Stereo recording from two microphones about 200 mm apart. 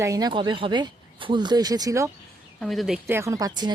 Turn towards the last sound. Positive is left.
turn(degrees=-20)  # may be behind; listen again after turning